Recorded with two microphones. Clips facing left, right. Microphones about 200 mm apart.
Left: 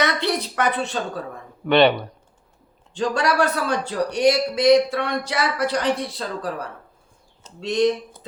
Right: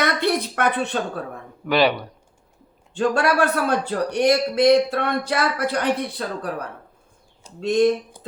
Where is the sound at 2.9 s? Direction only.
55° right (ahead or behind).